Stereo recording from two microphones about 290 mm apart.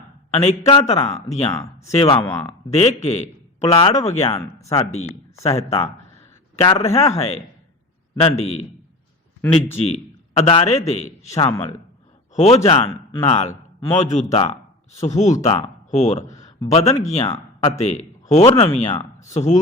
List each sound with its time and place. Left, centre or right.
0.3 s speech: left
9.7 s a man's voice: left
11.3 s speech: centre
12.3 s a man's voice: left